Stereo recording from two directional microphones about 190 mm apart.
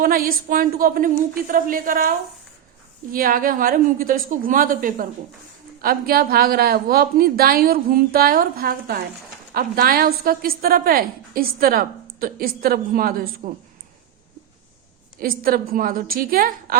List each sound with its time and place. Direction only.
0.0 s a sound: 50° right (ahead or behind)
0.4 s a woman's voice: 50° right (ahead or behind)
15.2 s a woman's voice: 50° right (ahead or behind)